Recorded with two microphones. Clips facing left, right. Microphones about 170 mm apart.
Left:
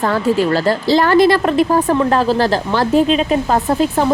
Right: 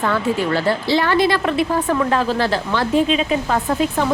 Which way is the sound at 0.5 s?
40° left (ahead or behind).